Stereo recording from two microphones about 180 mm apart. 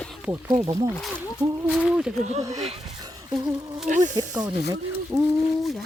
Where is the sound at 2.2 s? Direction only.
40° right (ahead or behind).